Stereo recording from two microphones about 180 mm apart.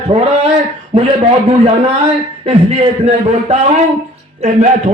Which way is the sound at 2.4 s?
30° right (ahead or behind).